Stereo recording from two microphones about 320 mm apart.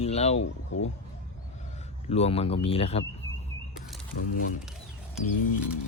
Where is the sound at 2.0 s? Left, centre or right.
Centre.